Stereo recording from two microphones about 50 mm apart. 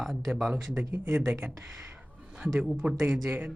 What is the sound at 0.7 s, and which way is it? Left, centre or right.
Speech, right.